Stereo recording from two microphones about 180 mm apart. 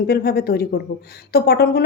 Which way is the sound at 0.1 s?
60° left (ahead or behind).